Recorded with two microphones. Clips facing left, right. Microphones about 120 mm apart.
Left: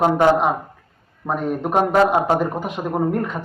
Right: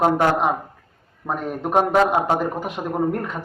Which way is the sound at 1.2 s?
5° left (ahead or behind).